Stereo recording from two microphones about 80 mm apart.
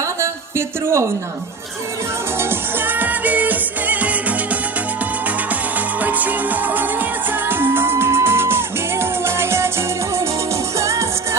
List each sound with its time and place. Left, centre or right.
0.0 s a sound: right
2.4 s music: right
6.0 s music: right